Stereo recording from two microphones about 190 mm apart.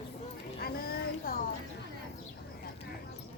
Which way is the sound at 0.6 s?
55° left (ahead or behind).